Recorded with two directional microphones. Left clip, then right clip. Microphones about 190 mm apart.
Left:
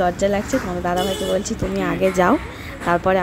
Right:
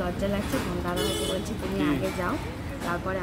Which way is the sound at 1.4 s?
30° left (ahead or behind).